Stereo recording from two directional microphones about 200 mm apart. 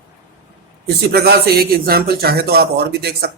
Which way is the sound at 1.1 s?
50° right (ahead or behind).